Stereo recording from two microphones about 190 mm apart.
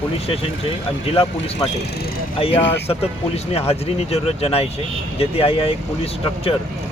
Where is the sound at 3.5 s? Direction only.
35° left (ahead or behind).